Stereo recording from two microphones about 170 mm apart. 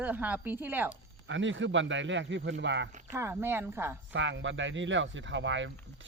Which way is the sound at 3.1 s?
15° right (ahead or behind).